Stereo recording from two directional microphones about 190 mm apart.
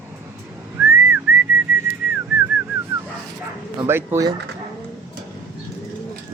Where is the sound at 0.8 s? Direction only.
10° right (ahead or behind).